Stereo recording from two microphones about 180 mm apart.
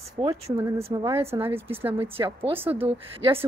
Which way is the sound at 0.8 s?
30° right (ahead or behind).